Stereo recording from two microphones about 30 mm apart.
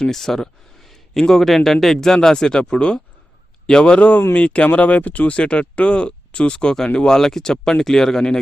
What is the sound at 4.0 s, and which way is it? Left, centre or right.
Speech, left.